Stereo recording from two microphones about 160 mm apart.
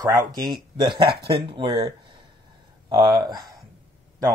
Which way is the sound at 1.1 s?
80° right.